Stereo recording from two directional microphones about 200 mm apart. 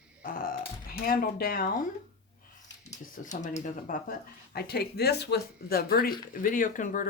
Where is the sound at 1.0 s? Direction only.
45° left (ahead or behind).